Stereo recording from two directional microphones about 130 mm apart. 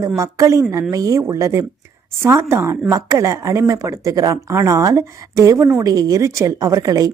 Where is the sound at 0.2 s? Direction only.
25° right (ahead or behind).